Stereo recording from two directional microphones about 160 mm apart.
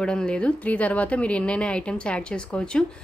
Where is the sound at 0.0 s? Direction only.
5° left (ahead or behind).